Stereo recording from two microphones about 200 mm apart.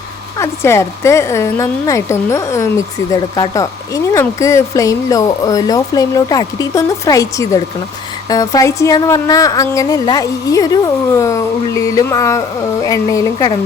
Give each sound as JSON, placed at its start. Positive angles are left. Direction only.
{"t": 0.3, "sound": "speech", "side_deg": 15}